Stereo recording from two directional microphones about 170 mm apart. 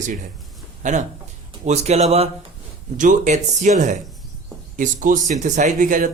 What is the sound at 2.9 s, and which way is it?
Speech, 50° right (ahead or behind).